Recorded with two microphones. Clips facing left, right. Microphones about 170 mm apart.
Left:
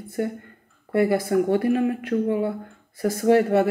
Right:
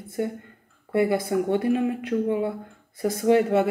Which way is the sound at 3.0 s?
20° right (ahead or behind).